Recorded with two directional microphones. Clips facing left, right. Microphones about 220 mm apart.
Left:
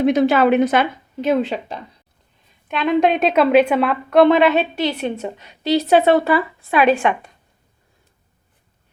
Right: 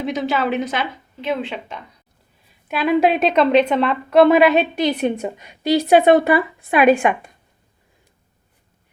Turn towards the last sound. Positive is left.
turn(degrees=-10)  # may be behind; listen again after turning